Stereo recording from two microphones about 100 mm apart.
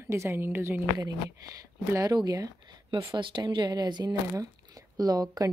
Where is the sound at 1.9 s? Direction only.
40° right (ahead or behind).